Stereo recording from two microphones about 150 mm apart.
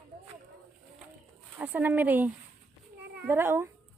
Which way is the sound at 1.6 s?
10° right (ahead or behind).